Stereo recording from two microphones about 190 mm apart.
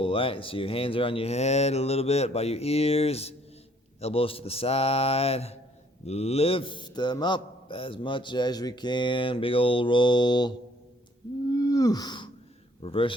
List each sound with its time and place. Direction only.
0.0 s a man's voice: 30° left (ahead or behind)
11.5 s wheeze: 20° left (ahead or behind)
12.8 s a man's voice: 30° left (ahead or behind)